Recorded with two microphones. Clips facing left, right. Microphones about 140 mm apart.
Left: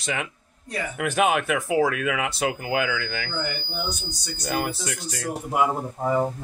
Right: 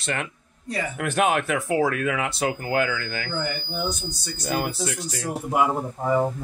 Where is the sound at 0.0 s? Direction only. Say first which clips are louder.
Even; centre (ahead or behind).